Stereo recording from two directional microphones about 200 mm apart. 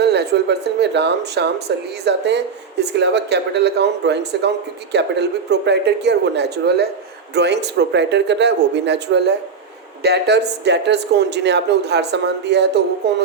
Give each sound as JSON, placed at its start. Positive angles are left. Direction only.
{"t": 0.0, "sound": "speech", "side_deg": -55}